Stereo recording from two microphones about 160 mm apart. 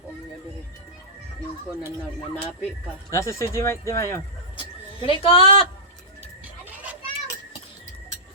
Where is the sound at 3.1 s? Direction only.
20° left (ahead or behind).